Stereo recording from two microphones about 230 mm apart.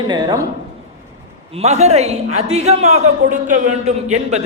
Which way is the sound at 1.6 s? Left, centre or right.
Right.